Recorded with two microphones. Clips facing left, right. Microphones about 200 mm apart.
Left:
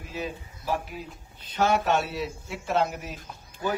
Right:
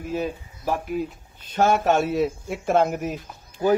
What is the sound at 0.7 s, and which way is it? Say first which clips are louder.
A man's voice: right 6 dB; 50° right (ahead or behind).